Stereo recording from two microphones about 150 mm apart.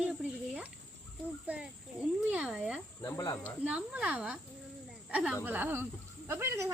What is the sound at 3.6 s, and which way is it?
Speech, 10° right (ahead or behind).